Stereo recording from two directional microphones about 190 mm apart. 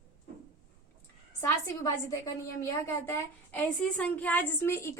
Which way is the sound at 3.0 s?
10° left (ahead or behind).